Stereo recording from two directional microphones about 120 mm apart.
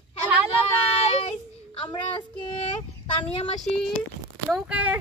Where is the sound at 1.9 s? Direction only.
40° left (ahead or behind).